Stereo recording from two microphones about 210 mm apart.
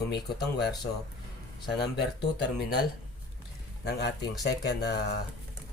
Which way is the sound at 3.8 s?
50° left (ahead or behind).